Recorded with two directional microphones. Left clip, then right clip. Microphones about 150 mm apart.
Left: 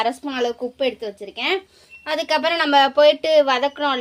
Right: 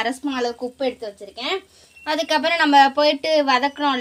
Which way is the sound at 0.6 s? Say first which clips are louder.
Left 2 dB; 25° left (ahead or behind).